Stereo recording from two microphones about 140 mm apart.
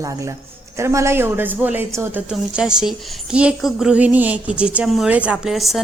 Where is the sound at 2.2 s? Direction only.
5° right (ahead or behind).